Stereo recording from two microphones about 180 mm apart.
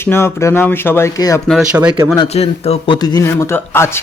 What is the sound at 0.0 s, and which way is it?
Speech, 15° left (ahead or behind).